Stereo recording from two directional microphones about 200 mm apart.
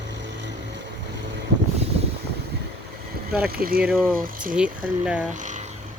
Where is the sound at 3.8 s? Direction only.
Centre (ahead or behind).